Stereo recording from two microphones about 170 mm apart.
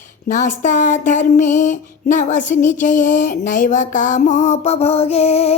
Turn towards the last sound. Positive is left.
turn(degrees=35)  # may be behind; listen again after turning